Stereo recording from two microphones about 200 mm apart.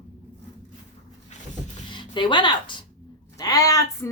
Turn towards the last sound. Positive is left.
turn(degrees=15)  # may be behind; listen again after turning